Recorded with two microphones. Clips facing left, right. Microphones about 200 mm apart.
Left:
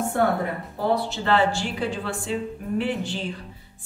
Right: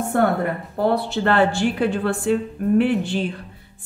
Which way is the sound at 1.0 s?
55° right (ahead or behind).